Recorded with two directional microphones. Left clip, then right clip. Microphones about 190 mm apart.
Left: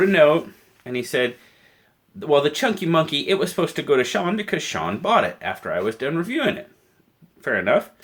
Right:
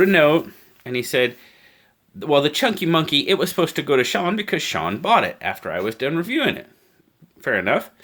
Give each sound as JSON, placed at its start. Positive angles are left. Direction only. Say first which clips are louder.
{"t": 0.0, "sound": "speech", "louder": "even", "side_deg": -55}
{"t": 0.9, "sound": "speech", "louder": "right 2 dB", "side_deg": -40}